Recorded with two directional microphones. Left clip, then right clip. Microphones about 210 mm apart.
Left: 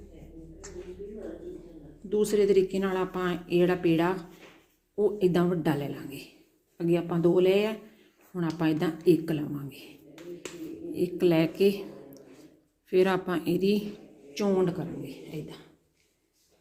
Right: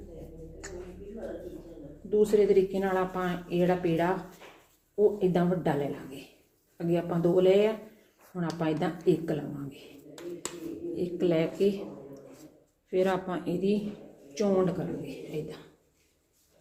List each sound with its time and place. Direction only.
2.0 s speech: 50° left (ahead or behind)
5.2 s speech: 50° left (ahead or behind)
6.7 s speech: 50° left (ahead or behind)
10.9 s a man's voice: 50° left (ahead or behind)